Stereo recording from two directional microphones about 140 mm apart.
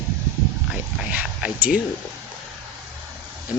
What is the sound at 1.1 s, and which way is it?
Speech, 10° right (ahead or behind).